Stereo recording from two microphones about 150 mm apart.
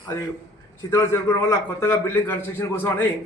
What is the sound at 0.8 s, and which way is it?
A man's voice, 20° left (ahead or behind).